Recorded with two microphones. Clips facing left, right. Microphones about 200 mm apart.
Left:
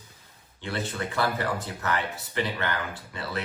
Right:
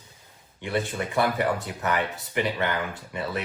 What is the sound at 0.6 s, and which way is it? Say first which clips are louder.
Speech: right 4 dB; 15° right (ahead or behind).